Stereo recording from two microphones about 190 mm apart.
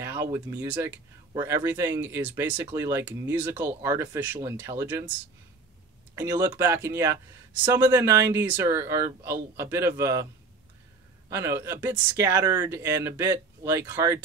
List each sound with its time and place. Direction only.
0.0 s speech: 15° right (ahead or behind)
6.1 s speech: 20° right (ahead or behind)
11.2 s speech: 15° right (ahead or behind)